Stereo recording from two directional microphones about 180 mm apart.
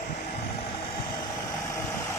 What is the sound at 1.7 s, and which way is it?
Vehicle, 15° left (ahead or behind).